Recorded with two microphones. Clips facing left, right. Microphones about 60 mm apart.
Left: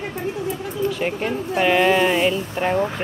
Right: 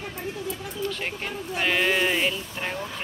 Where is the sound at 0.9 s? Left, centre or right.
Centre.